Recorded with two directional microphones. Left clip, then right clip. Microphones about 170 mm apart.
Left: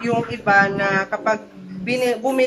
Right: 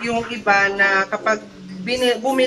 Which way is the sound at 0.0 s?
Centre (ahead or behind).